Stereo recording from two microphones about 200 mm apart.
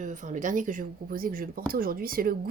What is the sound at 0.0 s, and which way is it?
Speech, 40° right (ahead or behind).